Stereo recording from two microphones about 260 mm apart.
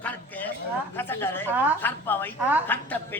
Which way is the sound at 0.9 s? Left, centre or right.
Centre.